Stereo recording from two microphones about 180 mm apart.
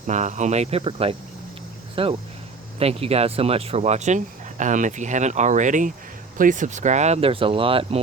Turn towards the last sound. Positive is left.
turn(degrees=-30)  # may be behind; listen again after turning